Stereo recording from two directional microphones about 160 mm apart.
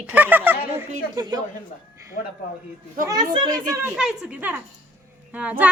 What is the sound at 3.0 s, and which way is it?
Speech, 25° right (ahead or behind).